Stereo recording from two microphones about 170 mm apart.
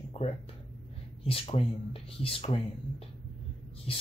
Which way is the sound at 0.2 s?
35° left (ahead or behind).